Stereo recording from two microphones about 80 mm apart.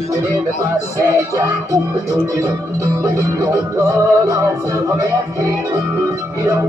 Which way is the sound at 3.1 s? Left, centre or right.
Right.